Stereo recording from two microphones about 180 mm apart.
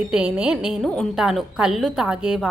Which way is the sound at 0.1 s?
5° right (ahead or behind).